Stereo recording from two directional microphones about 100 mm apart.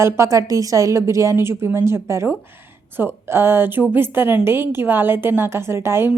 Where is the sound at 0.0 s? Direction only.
30° right (ahead or behind).